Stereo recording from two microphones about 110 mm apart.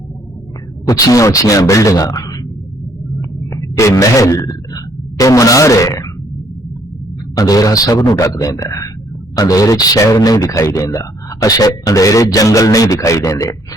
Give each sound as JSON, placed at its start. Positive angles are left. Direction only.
{"t": 0.9, "sound": "speech", "side_deg": 35}
{"t": 3.2, "sound": "a sound", "side_deg": 30}
{"t": 7.3, "sound": "a man's voice", "side_deg": 35}